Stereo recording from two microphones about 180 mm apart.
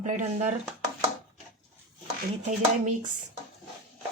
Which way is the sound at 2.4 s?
45° right (ahead or behind).